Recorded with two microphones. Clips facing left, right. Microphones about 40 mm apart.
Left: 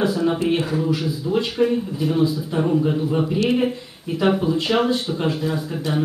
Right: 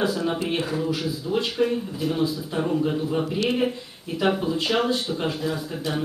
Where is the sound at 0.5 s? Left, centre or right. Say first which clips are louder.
Left 5 dB; centre.